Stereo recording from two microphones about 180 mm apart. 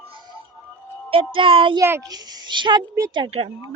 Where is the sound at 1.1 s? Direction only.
30° right (ahead or behind).